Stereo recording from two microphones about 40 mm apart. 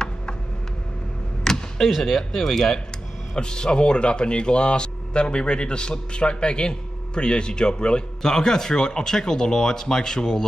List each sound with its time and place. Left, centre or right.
1.4 s a sound: centre
1.9 s speech: centre
2.1 s speech: centre